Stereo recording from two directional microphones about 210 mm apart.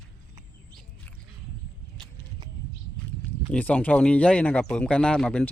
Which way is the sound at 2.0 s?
20° right (ahead or behind).